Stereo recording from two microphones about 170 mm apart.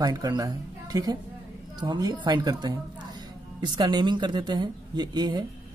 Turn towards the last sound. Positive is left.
turn(degrees=-25)  # may be behind; listen again after turning